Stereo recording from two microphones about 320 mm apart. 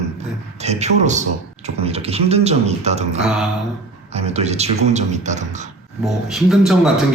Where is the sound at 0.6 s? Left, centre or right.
Right.